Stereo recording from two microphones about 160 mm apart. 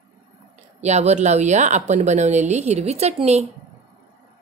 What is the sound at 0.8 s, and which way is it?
Speech, 45° right (ahead or behind).